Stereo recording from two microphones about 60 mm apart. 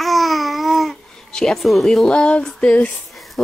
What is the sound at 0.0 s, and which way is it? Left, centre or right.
Babbling, centre.